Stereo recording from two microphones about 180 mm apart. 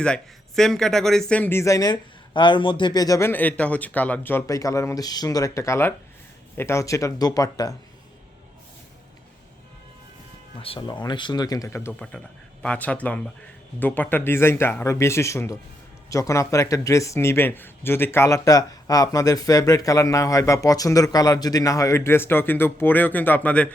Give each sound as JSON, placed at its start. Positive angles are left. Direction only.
{"t": 0.0, "sound": "speech", "side_deg": 5}
{"t": 10.6, "sound": "speech", "side_deg": 25}